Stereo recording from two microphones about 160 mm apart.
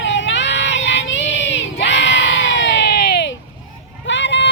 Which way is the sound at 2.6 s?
90° left.